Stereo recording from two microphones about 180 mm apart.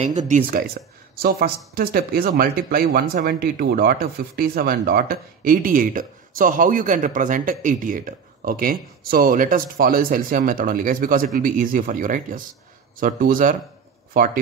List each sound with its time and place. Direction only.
0.0 s speech: 40° right (ahead or behind)